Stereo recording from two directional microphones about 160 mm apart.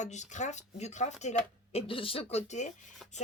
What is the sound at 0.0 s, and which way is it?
Speech, 45° left (ahead or behind).